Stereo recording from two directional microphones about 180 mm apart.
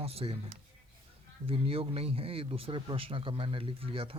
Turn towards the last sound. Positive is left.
turn(degrees=-30)  # may be behind; listen again after turning